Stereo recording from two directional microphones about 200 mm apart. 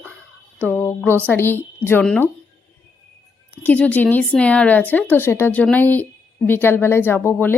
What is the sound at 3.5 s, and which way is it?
Speech, 10° left (ahead or behind).